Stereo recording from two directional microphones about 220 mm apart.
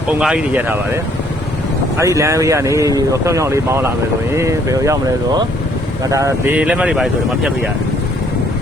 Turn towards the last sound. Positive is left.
turn(degrees=0)  # may be behind; listen again after turning